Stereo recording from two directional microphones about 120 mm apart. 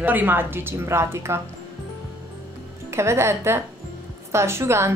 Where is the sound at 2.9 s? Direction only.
20° right (ahead or behind).